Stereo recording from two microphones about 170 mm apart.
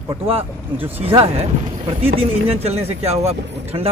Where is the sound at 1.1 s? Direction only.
35° right (ahead or behind).